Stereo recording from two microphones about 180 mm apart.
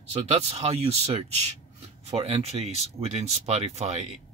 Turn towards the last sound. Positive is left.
turn(degrees=-40)  # may be behind; listen again after turning